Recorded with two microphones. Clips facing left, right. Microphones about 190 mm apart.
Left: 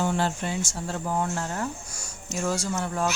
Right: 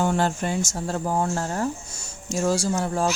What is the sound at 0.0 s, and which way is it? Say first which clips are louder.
A woman's voice: right 3 dB; 45° right (ahead or behind).